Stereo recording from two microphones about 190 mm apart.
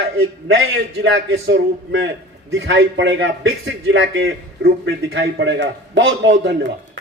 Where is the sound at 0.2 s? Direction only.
90° right.